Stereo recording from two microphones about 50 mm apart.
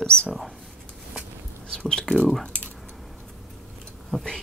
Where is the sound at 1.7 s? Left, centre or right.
Centre.